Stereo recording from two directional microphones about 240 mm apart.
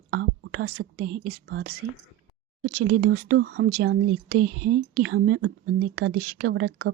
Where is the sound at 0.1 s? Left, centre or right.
Right.